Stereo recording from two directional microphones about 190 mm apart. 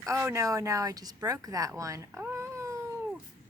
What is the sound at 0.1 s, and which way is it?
Speech, 15° right (ahead or behind).